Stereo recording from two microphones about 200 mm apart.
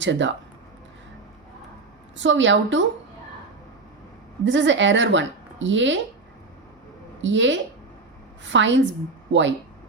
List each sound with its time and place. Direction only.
0.0 s speech: 65° right (ahead or behind)
2.1 s a woman's voice: 65° right (ahead or behind)
4.4 s speech: 65° right (ahead or behind)
7.2 s speech: 65° right (ahead or behind)